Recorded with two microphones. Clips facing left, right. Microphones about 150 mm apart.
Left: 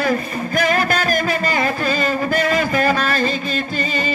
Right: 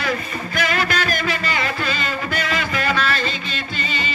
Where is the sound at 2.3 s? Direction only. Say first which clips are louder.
Left 6 dB; 40° left (ahead or behind).